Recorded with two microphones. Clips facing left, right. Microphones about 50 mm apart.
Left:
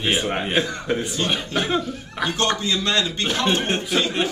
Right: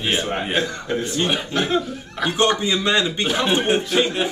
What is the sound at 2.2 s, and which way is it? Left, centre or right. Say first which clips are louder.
A man's voice: right 3 dB; centre.